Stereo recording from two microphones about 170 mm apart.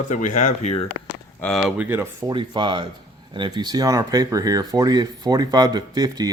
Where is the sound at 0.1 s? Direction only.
45° left (ahead or behind).